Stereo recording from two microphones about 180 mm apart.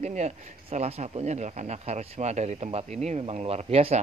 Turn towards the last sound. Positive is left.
turn(degrees=-35)  # may be behind; listen again after turning